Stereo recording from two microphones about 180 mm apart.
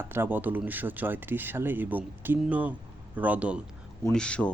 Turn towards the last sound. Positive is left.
turn(degrees=5)  # may be behind; listen again after turning